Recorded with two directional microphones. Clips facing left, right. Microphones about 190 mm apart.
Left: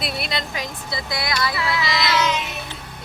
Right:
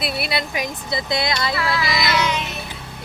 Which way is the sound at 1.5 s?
20° left (ahead or behind).